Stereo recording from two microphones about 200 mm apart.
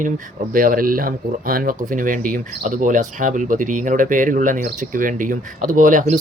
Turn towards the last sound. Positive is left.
turn(degrees=-40)  # may be behind; listen again after turning